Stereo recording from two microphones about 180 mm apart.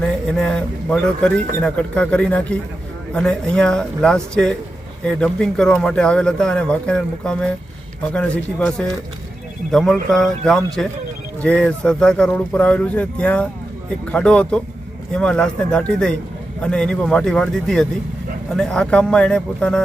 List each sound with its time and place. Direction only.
0.3 s speech: 5° left (ahead or behind)